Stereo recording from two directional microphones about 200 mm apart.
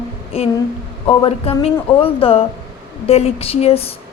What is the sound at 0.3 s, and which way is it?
A woman's voice, 30° left (ahead or behind).